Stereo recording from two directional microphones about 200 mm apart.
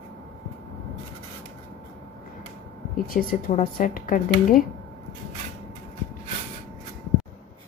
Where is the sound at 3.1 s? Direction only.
45° left (ahead or behind).